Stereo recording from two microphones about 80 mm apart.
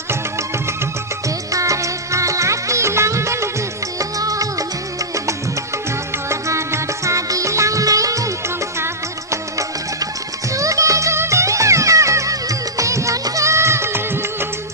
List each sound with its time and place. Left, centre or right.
1.5 s music: right
6.2 s music: right
9.3 s music: right